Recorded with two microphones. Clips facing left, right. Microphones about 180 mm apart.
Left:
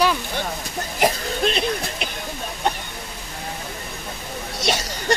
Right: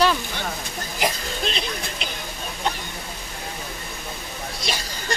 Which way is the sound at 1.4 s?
50° left (ahead or behind).